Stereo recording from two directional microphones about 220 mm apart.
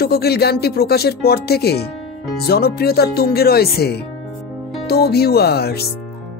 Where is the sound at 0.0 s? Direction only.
45° left (ahead or behind).